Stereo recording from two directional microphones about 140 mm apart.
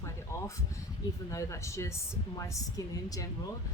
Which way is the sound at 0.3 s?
20° left (ahead or behind).